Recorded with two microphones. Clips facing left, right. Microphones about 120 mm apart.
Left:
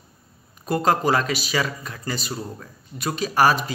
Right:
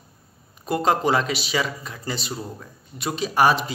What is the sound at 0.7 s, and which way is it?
A man's voice, 20° right (ahead or behind).